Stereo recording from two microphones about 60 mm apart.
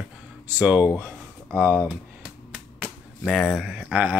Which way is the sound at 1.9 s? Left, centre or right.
Right.